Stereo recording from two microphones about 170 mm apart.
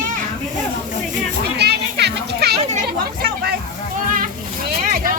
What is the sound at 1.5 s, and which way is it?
Children playing, 75° right (ahead or behind).